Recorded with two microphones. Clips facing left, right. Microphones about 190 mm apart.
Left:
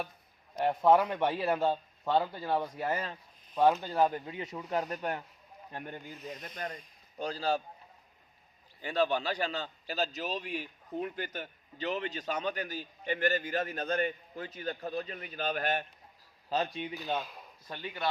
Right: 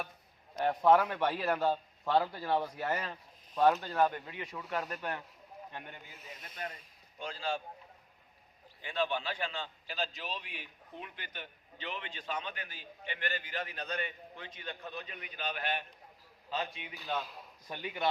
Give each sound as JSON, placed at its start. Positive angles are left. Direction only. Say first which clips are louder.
{"t": 0.5, "sound": "a man's voice", "louder": "left 1 dB", "side_deg": 15}
{"t": 2.6, "sound": "speech", "louder": "left 1 dB", "side_deg": 0}
{"t": 3.6, "sound": "a man's voice", "louder": "left 1 dB", "side_deg": 15}
{"t": 3.9, "sound": "speech", "louder": "left 2 dB", "side_deg": 30}
{"t": 5.7, "sound": "a man's voice", "louder": "left 7 dB", "side_deg": 40}
{"t": 6.1, "sound": "speech", "louder": "left 8 dB", "side_deg": -5}
{"t": 6.6, "sound": "a man's voice", "louder": "even", "side_deg": 40}
{"t": 8.8, "sound": "a man's voice", "louder": "left 5 dB", "side_deg": 40}
{"t": 17.2, "sound": "speech", "louder": "left 1 dB", "side_deg": 0}
{"t": 17.7, "sound": "speech", "louder": "right 1 dB", "side_deg": -15}